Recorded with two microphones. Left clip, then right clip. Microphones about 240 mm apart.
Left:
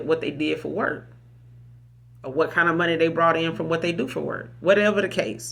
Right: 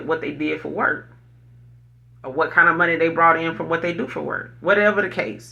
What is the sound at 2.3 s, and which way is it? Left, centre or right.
Speech, left.